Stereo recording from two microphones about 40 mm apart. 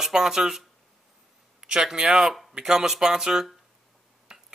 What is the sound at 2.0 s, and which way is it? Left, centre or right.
A man's voice, centre.